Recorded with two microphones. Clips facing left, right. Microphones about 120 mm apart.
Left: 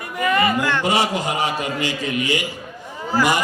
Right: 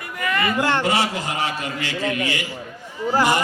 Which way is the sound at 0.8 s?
15° left (ahead or behind).